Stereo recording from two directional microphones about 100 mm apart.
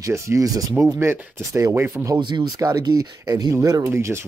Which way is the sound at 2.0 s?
50° right (ahead or behind).